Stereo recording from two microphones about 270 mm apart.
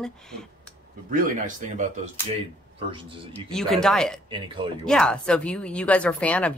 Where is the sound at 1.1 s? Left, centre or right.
Right.